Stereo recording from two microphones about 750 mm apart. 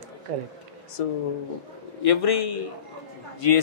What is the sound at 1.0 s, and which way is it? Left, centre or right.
Speech, left.